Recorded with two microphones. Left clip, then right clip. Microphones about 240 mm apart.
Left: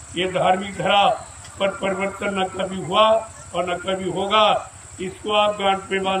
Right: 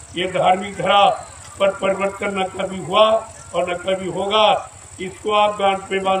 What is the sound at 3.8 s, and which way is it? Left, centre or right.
A man's voice, centre.